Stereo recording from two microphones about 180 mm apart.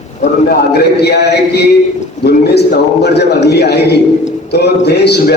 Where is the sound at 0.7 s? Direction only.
65° left (ahead or behind).